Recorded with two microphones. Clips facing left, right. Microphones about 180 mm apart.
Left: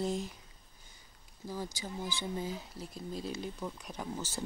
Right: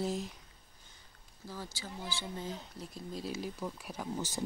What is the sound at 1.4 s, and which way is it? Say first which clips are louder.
Speech: left 4 dB; 15° left (ahead or behind).